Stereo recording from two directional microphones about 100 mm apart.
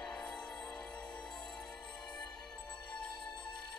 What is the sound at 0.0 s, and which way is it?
Music, 5° left (ahead or behind).